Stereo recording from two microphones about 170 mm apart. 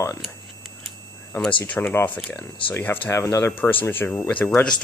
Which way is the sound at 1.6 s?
10° left (ahead or behind).